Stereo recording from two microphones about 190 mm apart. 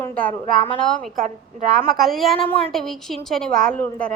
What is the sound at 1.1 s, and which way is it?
Speech, 45° right (ahead or behind).